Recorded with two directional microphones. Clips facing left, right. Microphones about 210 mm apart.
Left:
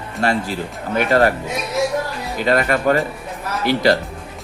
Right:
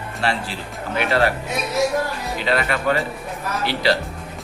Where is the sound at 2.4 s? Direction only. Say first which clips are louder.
Left 5 dB; 45° left (ahead or behind).